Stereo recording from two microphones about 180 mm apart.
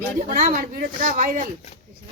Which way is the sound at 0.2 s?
50° right (ahead or behind).